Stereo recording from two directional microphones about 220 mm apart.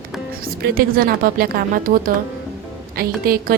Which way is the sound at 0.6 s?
40° right (ahead or behind).